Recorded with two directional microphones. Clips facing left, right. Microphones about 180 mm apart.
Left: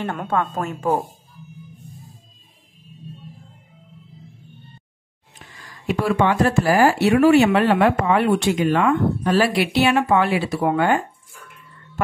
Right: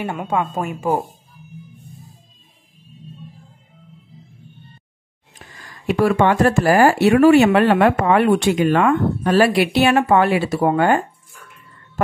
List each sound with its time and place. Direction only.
0.0 s a woman's voice: 10° right (ahead or behind)
5.9 s speech: 55° right (ahead or behind)